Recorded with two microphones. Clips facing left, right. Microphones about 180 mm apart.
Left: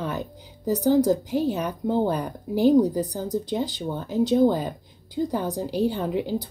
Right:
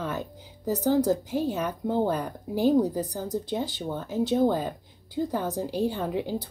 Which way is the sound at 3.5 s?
15° left (ahead or behind).